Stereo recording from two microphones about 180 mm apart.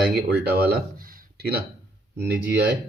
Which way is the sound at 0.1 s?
60° right (ahead or behind).